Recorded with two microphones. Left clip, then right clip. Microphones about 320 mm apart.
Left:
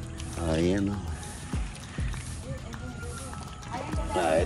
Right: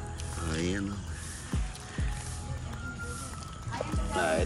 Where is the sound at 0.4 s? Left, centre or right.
Centre.